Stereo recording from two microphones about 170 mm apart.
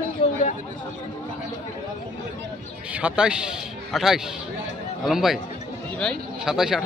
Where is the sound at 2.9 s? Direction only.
5° right (ahead or behind).